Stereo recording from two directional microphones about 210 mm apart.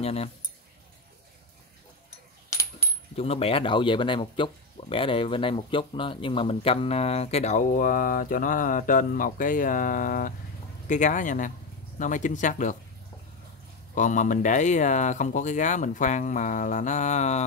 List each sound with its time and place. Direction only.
0.0 s speech: 30° left (ahead or behind)
3.2 s speech: 30° left (ahead or behind)
13.9 s speech: 35° left (ahead or behind)